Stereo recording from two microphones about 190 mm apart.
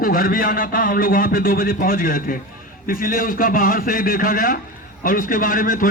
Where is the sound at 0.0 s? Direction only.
50° left (ahead or behind).